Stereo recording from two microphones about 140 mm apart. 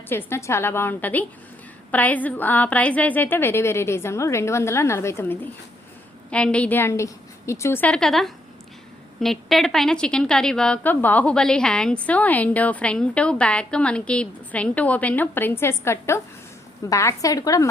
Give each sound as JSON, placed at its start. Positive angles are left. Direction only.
{"t": 0.1, "sound": "a woman's voice", "side_deg": 15}